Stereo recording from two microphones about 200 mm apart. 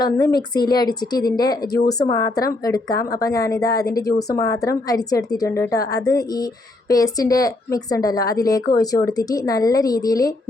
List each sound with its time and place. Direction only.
0.2 s a woman's voice: 50° left (ahead or behind)
0.5 s a woman's voice: 20° left (ahead or behind)